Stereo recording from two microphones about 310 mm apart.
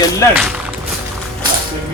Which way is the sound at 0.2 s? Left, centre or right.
Centre.